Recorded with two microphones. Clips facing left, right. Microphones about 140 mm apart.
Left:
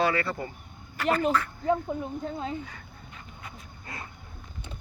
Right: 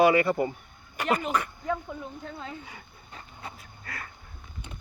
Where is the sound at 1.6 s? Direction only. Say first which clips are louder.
Left 5 dB; 25° left (ahead or behind).